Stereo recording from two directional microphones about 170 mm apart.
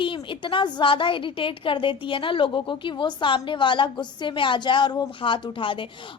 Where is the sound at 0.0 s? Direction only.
30° left (ahead or behind).